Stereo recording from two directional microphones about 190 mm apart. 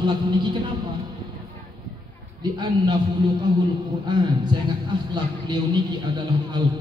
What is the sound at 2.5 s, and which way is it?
Speech, 20° right (ahead or behind).